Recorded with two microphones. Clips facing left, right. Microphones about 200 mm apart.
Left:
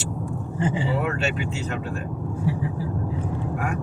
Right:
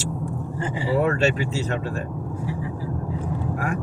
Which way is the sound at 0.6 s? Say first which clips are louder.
Left 2 dB; 20° left (ahead or behind).